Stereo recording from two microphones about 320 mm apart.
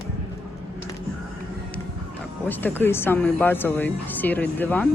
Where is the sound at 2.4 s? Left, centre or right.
Centre.